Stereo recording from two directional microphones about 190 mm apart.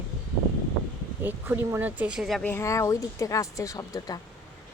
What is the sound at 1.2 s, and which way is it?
Speech, 10° right (ahead or behind).